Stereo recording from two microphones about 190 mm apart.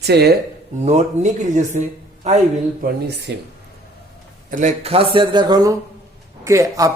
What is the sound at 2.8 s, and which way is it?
Speech, 60° right (ahead or behind).